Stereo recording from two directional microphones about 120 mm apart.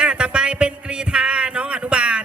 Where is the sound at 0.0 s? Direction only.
10° right (ahead or behind).